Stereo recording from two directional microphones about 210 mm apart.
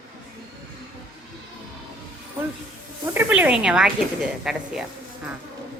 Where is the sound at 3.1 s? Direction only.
10° right (ahead or behind).